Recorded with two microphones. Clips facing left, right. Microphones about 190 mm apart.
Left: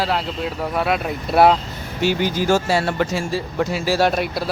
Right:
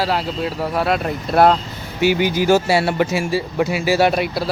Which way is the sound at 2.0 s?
10° right (ahead or behind).